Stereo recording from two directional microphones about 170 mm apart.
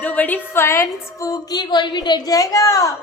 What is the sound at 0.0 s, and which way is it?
A woman's voice, 10° left (ahead or behind).